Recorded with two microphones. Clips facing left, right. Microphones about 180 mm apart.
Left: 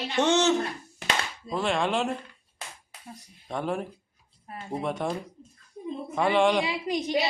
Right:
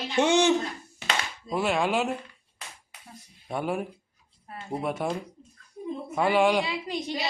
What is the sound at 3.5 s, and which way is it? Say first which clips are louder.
Speech: right 1 dB; 5° right (ahead or behind).